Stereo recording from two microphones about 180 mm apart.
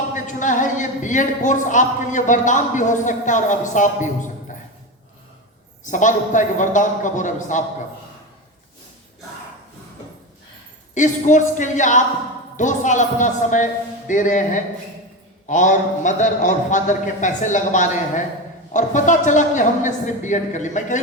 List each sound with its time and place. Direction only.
0.1 s a man's voice: 45° left (ahead or behind)
5.8 s a man's voice: 45° left (ahead or behind)
10.9 s a man's voice: 45° left (ahead or behind)